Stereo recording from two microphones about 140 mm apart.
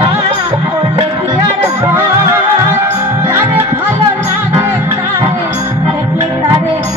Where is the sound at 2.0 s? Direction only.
15° right (ahead or behind).